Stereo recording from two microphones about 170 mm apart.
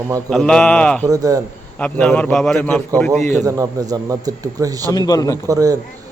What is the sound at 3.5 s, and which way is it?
A man's voice, 20° right (ahead or behind).